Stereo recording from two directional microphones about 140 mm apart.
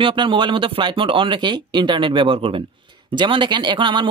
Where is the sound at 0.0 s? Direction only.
35° right (ahead or behind).